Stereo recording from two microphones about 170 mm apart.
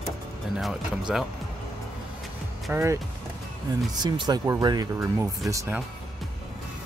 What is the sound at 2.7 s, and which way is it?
Speech, 15° right (ahead or behind).